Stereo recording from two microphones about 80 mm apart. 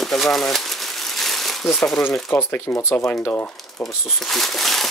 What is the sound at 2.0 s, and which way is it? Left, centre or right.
Speech, left.